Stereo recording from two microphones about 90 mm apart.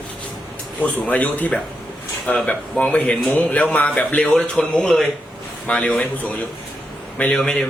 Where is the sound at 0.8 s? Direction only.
15° left (ahead or behind).